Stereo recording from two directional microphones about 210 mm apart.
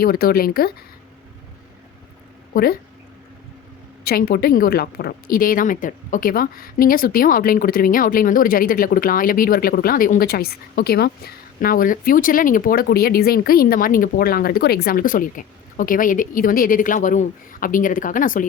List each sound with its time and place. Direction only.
0.0 s a woman's voice: 45° left (ahead or behind)
2.5 s speech: 45° left (ahead or behind)
4.0 s a woman's voice: 45° left (ahead or behind)